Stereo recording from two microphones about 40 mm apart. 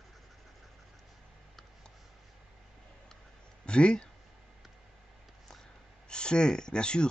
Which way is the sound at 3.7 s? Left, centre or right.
Left.